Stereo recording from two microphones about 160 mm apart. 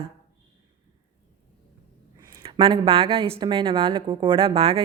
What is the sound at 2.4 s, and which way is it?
A woman's voice, 35° right (ahead or behind).